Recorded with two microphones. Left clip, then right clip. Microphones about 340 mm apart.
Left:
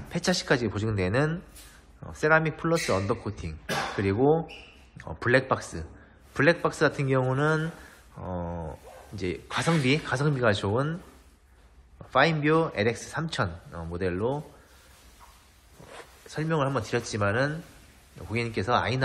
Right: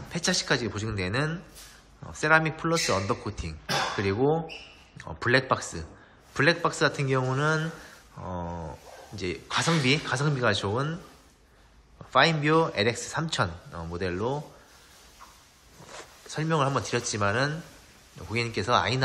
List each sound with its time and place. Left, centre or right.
0.1 s speech: centre
12.1 s speech: centre
16.3 s speech: centre